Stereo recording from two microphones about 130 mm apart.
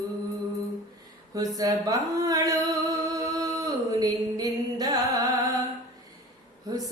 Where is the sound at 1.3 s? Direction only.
25° right (ahead or behind).